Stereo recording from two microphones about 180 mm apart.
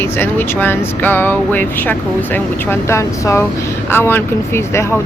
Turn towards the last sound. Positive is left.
turn(degrees=15)  # may be behind; listen again after turning